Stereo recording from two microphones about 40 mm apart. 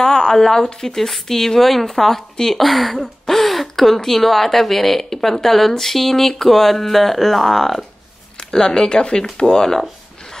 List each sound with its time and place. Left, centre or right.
0.0 s speech: centre
8.4 s speech: centre